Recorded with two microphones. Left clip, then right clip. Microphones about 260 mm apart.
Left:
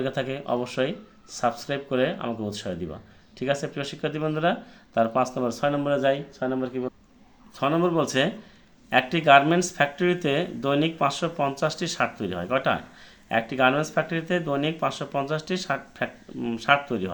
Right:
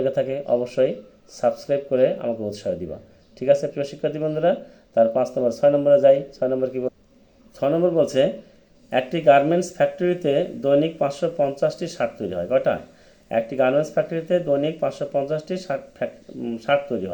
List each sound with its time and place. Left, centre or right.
0.0 s speech: centre
3.4 s speech: centre
9.1 s speech: centre